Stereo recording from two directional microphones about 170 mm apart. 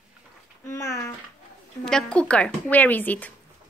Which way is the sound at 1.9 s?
5° left (ahead or behind).